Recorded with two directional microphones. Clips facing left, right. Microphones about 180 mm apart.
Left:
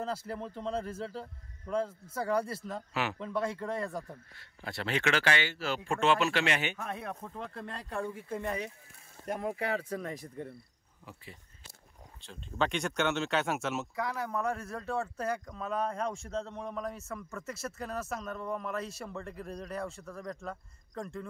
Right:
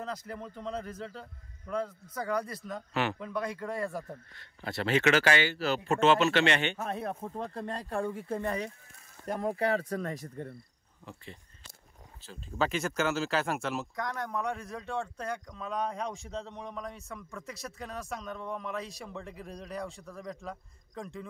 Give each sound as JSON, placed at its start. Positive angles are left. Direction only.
{"t": 0.0, "sound": "speech", "side_deg": 30}
{"t": 2.9, "sound": "speech", "side_deg": 0}
{"t": 3.2, "sound": "speech", "side_deg": 30}
{"t": 4.6, "sound": "speech", "side_deg": 0}
{"t": 5.1, "sound": "speech", "side_deg": -40}
{"t": 5.9, "sound": "speech", "side_deg": 0}
{"t": 6.8, "sound": "speech", "side_deg": -35}
{"t": 9.4, "sound": "speech", "side_deg": -40}
{"t": 12.2, "sound": "speech", "side_deg": -5}